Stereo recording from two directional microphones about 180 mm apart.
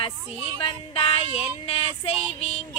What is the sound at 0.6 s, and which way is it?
Music, 30° left (ahead or behind).